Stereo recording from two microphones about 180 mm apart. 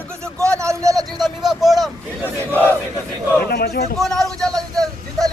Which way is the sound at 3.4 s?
60° left (ahead or behind).